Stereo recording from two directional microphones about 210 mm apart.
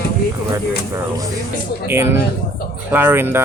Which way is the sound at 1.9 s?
10° right (ahead or behind).